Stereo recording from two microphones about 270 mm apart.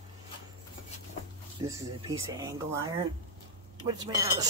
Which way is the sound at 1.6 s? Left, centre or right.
Centre.